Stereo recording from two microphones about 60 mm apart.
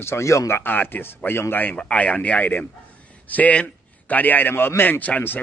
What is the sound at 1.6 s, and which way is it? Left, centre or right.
A man's voice, left.